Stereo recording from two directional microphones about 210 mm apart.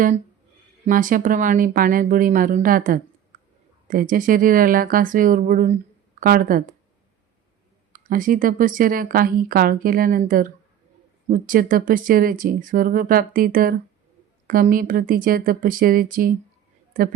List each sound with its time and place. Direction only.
0.9 s a woman's voice: 40° right (ahead or behind)
3.3 s a sound: 40° right (ahead or behind)
3.8 s a woman's voice: 40° right (ahead or behind)
7.9 s a woman's voice: 40° right (ahead or behind)